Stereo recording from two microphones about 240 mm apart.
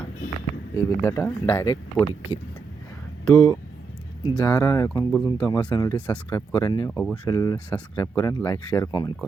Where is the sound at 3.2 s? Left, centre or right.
Centre.